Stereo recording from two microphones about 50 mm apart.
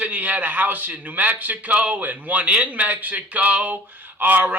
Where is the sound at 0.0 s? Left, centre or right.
Right.